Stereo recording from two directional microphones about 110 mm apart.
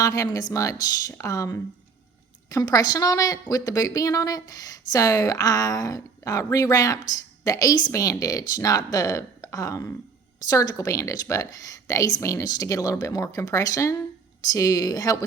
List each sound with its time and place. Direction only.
0.0 s speech: 30° left (ahead or behind)